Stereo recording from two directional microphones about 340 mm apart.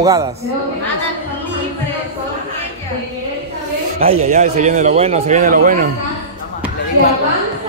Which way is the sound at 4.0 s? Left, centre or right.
Centre.